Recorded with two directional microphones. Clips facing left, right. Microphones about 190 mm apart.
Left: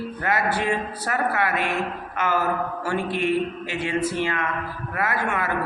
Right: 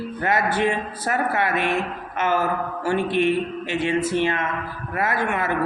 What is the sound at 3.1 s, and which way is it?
Speech, 25° right (ahead or behind).